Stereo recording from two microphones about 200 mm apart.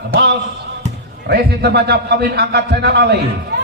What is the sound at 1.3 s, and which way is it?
A man's voice, 50° right (ahead or behind).